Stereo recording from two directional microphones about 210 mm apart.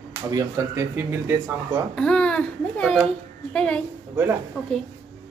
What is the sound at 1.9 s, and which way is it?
A child's voice, 5° left (ahead or behind).